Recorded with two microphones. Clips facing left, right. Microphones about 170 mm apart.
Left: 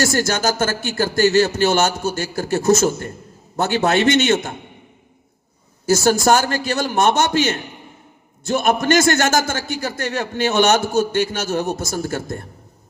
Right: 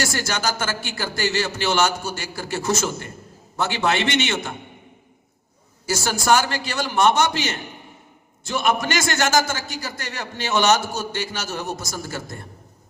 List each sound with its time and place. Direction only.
0.0 s a man's voice: 45° left (ahead or behind)
5.8 s a man's voice: 45° left (ahead or behind)